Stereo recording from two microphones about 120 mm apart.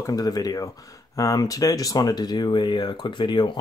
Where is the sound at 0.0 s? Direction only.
30° left (ahead or behind).